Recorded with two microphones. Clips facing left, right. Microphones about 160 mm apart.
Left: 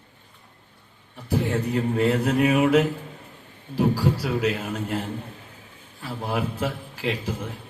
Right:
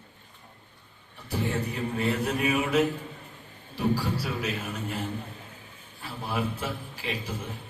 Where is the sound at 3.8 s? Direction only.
40° left (ahead or behind).